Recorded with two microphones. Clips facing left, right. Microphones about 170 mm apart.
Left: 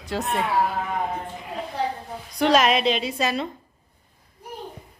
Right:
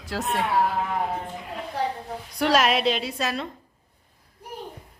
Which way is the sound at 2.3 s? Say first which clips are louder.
Left 2 dB; 5° right (ahead or behind).